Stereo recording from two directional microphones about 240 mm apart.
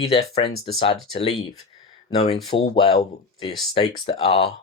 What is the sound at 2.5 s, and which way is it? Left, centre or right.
Speech, left.